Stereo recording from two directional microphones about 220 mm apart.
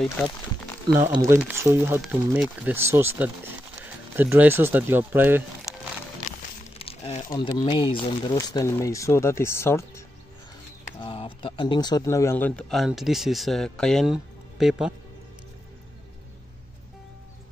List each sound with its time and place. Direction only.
1.1 s speech: 15° right (ahead or behind)
6.8 s crumpling: 25° left (ahead or behind)
7.2 s speech: 20° left (ahead or behind)
11.0 s speech: 25° left (ahead or behind); by 15.0 s 5° right (ahead or behind)